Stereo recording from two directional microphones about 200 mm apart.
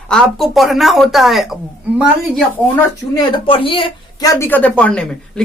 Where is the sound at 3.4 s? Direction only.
25° left (ahead or behind).